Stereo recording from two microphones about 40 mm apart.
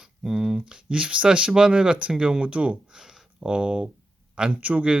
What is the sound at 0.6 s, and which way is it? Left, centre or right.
Speech, right.